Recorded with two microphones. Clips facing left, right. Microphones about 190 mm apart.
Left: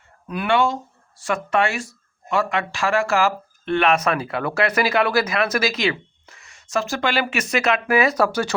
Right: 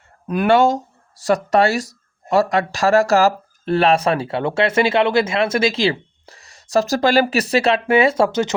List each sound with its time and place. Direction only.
0.3 s speech: 45° right (ahead or behind); by 8.5 s 20° right (ahead or behind)